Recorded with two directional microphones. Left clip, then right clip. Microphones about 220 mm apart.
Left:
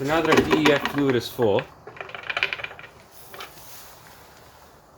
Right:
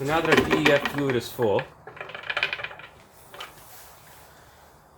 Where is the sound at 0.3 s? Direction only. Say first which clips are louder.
Left 1 dB; 10° left (ahead or behind).